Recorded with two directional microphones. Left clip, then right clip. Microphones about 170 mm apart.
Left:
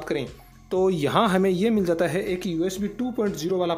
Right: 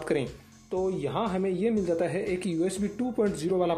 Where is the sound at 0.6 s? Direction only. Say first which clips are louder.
Left 7 dB; 50° left (ahead or behind).